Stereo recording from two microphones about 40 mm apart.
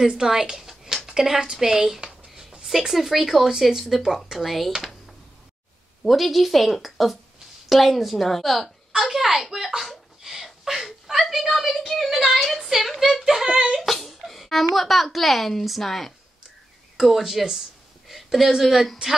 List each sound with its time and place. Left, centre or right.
0.1 s a woman's voice: centre
2.0 s writing: right
2.9 s a child's voice: centre
6.0 s a child's voice: centre
10.2 s a sound: centre
13.2 s speech: centre
13.7 s speech: centre
17.0 s a woman's voice: centre